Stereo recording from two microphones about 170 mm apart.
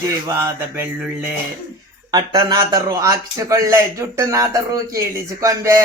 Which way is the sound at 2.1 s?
25° right (ahead or behind).